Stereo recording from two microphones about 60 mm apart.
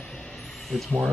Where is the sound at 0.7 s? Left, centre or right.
Centre.